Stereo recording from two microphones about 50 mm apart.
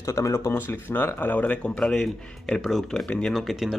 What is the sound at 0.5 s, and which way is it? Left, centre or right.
Speech, left.